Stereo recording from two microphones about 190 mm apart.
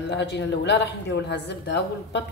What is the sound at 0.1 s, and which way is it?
A woman's voice, 65° left (ahead or behind).